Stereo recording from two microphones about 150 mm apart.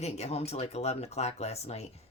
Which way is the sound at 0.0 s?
45° left (ahead or behind).